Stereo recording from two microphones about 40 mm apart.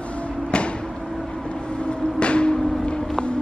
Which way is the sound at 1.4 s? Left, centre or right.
Left.